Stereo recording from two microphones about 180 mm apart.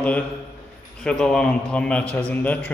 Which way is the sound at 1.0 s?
5° left (ahead or behind).